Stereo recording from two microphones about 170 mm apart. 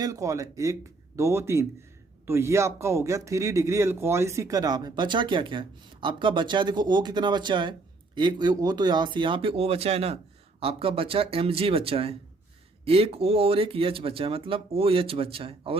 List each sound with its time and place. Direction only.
0.0 s speech: 20° right (ahead or behind)